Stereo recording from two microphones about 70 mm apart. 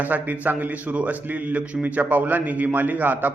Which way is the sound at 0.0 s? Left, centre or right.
Right.